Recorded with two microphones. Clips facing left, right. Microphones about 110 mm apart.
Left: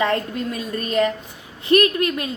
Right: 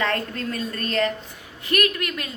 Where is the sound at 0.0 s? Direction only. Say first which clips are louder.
Left 4 dB; 15° left (ahead or behind).